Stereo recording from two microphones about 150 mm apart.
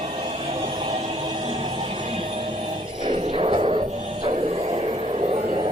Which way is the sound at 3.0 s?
35° right (ahead or behind).